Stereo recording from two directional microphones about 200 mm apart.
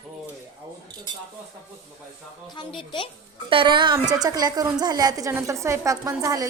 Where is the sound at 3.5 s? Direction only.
25° right (ahead or behind).